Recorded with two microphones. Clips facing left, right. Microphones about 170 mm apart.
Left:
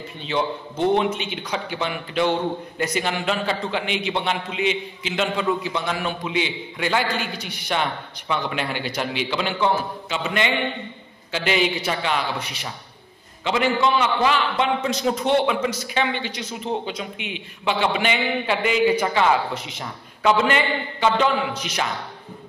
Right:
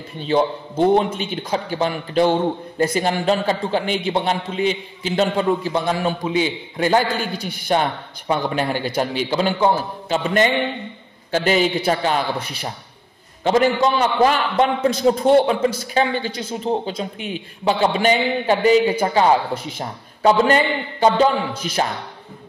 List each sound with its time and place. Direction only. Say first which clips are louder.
0.2 s a man's voice: right 6 dB; 40° right (ahead or behind)
15.0 s a man's voice: right 6 dB; 40° right (ahead or behind)